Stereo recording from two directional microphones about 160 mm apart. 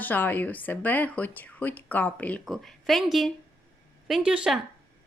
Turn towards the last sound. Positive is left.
turn(degrees=-5)  # may be behind; listen again after turning